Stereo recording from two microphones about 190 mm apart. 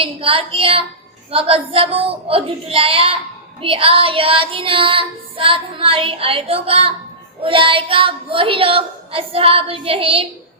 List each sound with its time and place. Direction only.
0.0 s child singing: 30° right (ahead or behind)